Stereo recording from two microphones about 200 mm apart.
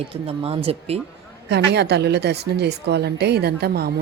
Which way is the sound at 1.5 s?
55° right (ahead or behind).